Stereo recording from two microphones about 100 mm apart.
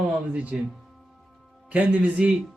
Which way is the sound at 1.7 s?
10° right (ahead or behind).